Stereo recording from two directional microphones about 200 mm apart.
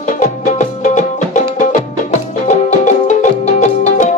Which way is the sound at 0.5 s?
40° left (ahead or behind).